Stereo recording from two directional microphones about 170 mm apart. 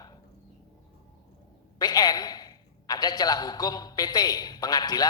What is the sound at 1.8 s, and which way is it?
A man's voice, 25° left (ahead or behind).